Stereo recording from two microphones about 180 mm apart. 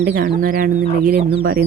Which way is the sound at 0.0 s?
55° right (ahead or behind).